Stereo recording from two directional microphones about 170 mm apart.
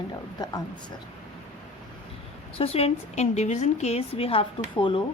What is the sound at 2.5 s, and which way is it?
A woman's voice, 35° left (ahead or behind).